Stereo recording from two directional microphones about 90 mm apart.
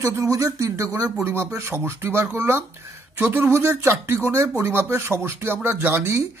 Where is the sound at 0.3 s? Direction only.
40° right (ahead or behind).